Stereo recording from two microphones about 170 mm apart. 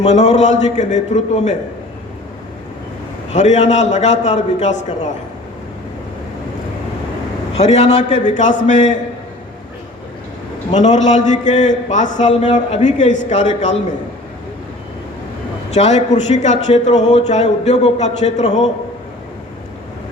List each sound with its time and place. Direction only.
0.0 s a man's voice: 40° left (ahead or behind)
3.3 s a man's voice: 40° left (ahead or behind)
7.5 s a man's voice: 40° left (ahead or behind)
10.7 s a man's voice: 45° left (ahead or behind)
15.7 s speech: 40° left (ahead or behind)